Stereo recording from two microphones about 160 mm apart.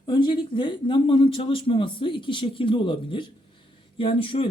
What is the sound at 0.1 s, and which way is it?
Speech, 30° left (ahead or behind).